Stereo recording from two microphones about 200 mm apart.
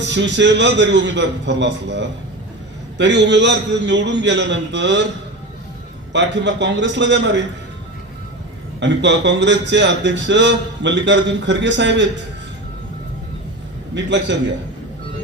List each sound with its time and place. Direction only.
0.0 s a man's voice: 60° right (ahead or behind)
6.1 s a man's voice: 65° right (ahead or behind)
8.8 s a man's voice: 60° right (ahead or behind)
13.9 s a man's voice: 65° right (ahead or behind)